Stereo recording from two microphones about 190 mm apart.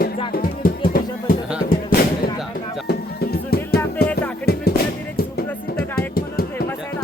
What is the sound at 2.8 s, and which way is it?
Music, 55° left (ahead or behind).